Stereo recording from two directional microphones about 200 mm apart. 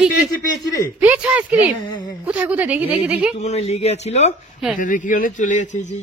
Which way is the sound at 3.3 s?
35° left (ahead or behind).